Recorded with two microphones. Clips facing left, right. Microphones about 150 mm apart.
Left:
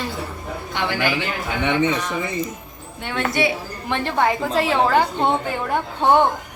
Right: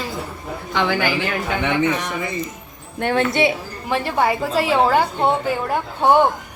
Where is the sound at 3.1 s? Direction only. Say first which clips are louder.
Right 3 dB; 25° right (ahead or behind).